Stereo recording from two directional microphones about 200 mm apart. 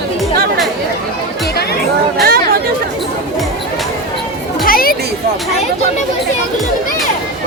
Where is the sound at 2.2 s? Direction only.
50° right (ahead or behind).